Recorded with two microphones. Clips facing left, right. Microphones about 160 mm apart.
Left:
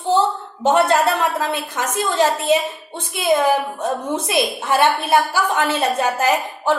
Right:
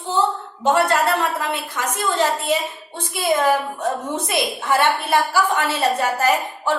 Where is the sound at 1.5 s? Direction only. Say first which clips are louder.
Left 2 dB; 20° left (ahead or behind).